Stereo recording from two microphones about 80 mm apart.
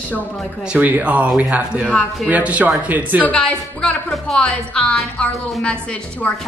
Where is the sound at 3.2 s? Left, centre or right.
Centre.